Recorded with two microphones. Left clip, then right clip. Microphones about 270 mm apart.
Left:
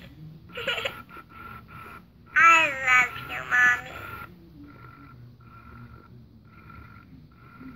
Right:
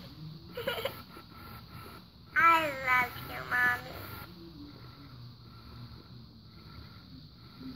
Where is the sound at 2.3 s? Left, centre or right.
Centre.